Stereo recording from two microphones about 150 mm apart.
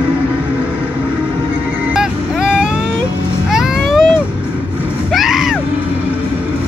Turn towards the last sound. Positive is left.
turn(degrees=0)  # may be behind; listen again after turning